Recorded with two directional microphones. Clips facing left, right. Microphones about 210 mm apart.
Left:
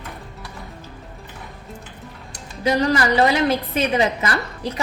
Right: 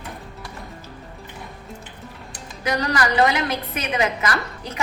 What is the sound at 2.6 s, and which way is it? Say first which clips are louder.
A woman's voice: left 4 dB; 30° left (ahead or behind).